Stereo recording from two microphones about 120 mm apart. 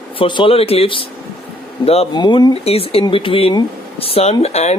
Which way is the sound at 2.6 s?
55° left (ahead or behind).